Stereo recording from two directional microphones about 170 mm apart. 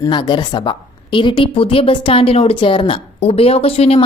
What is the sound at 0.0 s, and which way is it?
A woman's voice, 25° left (ahead or behind).